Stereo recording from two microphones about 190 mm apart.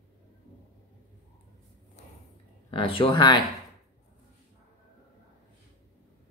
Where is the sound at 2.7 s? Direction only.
25° left (ahead or behind).